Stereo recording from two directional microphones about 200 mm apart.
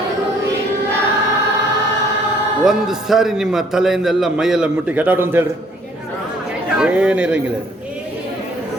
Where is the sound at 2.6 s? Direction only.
Centre (ahead or behind).